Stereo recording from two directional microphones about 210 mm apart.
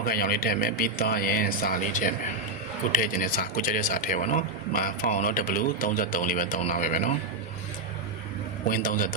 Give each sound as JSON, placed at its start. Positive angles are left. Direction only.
{"t": 0.0, "sound": "speech", "side_deg": 45}
{"t": 8.6, "sound": "speech", "side_deg": 40}